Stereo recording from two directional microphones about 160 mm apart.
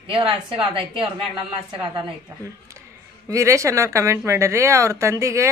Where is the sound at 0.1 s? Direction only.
35° right (ahead or behind).